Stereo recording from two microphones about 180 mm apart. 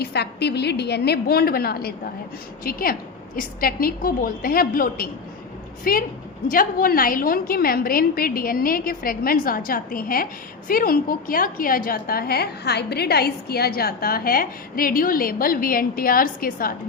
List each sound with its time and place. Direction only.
0.0 s a woman's voice: 65° left (ahead or behind)